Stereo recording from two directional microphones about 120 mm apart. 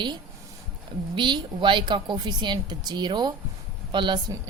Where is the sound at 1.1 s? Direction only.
40° right (ahead or behind).